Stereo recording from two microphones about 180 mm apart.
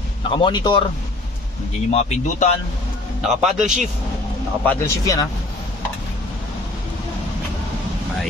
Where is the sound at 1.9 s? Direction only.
35° left (ahead or behind).